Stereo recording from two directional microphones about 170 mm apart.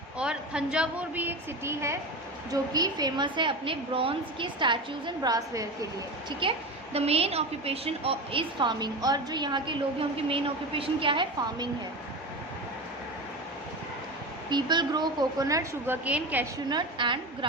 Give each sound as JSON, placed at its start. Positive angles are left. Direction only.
{"t": 0.2, "sound": "a woman's voice", "side_deg": -5}
{"t": 14.5, "sound": "a woman's voice", "side_deg": -25}
{"t": 16.6, "sound": "a woman's voice", "side_deg": -25}